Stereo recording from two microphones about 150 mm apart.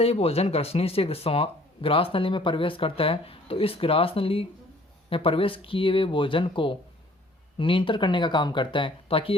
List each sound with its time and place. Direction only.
0.0 s speech: 40° left (ahead or behind)